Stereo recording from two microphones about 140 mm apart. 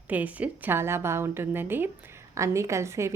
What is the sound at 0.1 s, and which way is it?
A woman's voice, 10° right (ahead or behind).